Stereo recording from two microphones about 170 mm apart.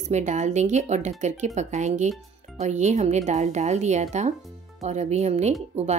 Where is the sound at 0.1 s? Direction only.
45° right (ahead or behind).